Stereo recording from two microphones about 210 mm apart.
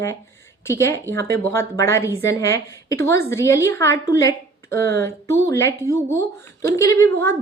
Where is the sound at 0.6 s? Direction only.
15° left (ahead or behind).